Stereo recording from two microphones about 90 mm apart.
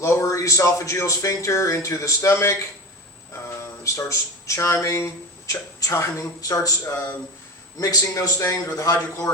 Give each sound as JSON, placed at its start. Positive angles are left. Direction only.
{"t": 0.0, "sound": "speech", "side_deg": 35}
{"t": 3.6, "sound": "speech", "side_deg": 35}
{"t": 6.8, "sound": "speech", "side_deg": 20}
{"t": 7.8, "sound": "speech", "side_deg": 40}